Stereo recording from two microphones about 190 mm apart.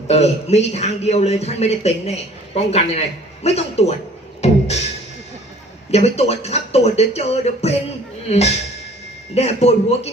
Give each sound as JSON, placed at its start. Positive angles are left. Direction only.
{"t": 0.1, "sound": "a man's voice", "side_deg": 35}
{"t": 4.4, "sound": "music", "side_deg": 35}
{"t": 5.9, "sound": "a man's voice", "side_deg": 35}